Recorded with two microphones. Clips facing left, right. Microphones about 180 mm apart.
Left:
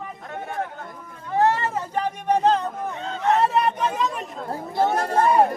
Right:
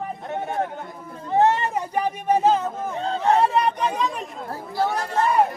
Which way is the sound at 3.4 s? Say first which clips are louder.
Right 1 dB; centre (ahead or behind).